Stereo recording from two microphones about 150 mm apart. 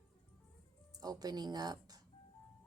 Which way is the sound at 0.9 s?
25° right (ahead or behind).